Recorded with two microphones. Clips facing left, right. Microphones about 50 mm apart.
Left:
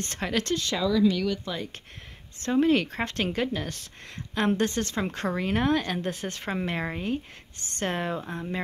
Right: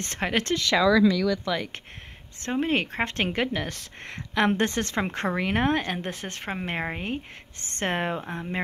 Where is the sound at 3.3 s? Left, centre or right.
Right.